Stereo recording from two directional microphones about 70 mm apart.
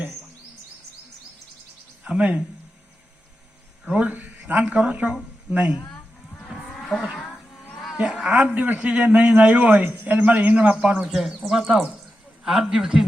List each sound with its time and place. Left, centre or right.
2.0 s a man's voice: centre
3.8 s speech: centre
6.8 s a sound: centre
7.9 s a man's voice: centre
8.5 s a man's voice: right